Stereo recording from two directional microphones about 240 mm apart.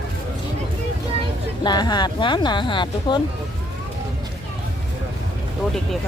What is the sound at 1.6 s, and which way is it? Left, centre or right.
Speech, centre.